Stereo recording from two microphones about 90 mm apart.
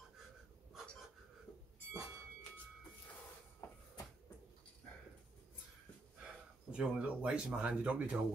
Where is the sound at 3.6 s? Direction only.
30° left (ahead or behind).